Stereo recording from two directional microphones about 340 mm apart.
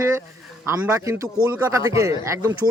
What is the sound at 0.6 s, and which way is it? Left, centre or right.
A man's voice, centre.